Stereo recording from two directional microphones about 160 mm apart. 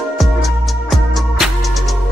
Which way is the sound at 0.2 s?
Centre (ahead or behind).